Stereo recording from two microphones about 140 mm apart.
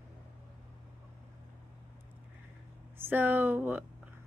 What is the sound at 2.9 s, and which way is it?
Speech, 15° right (ahead or behind).